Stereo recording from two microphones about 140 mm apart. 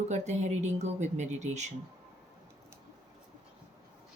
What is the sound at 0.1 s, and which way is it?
Speech, 55° right (ahead or behind).